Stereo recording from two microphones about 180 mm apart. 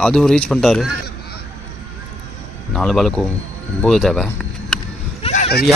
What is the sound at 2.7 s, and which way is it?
Speech, 5° left (ahead or behind).